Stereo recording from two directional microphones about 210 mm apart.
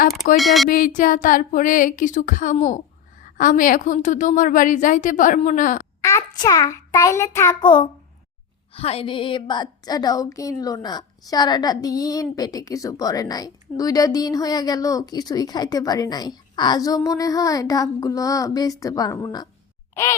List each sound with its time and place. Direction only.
0.3 s speech: centre (ahead or behind)
0.7 s a woman's voice: 40° left (ahead or behind)
6.0 s a sound: 15° left (ahead or behind)
19.9 s gasp: 15° left (ahead or behind)